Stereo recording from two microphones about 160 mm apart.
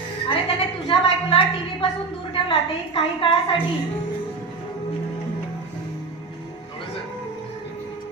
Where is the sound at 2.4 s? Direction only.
35° left (ahead or behind).